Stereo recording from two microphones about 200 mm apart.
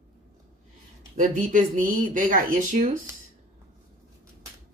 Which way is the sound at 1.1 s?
40° right (ahead or behind).